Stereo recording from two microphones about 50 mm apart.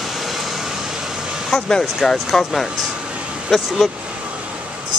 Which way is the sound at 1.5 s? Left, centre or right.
Centre.